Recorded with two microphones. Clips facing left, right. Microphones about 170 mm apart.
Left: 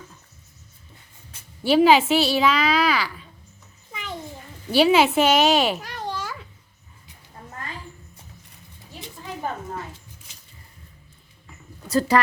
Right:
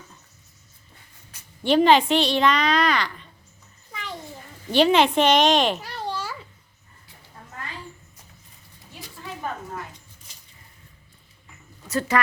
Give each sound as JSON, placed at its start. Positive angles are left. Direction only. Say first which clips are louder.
{"t": 1.6, "sound": "a woman's voice", "louder": "left 1 dB", "side_deg": 5}
{"t": 4.7, "sound": "a woman's voice", "louder": "left 1 dB", "side_deg": 5}
{"t": 5.9, "sound": "babbling", "louder": "even", "side_deg": 15}
{"t": 9.0, "sound": "a sound", "louder": "left 2 dB", "side_deg": 25}
{"t": 11.9, "sound": "speech", "louder": "left 4 dB", "side_deg": 35}